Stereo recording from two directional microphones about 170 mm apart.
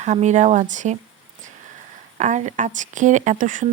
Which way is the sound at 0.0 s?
40° right (ahead or behind).